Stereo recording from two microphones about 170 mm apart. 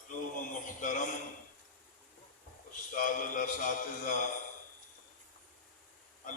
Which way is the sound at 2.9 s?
50° left (ahead or behind).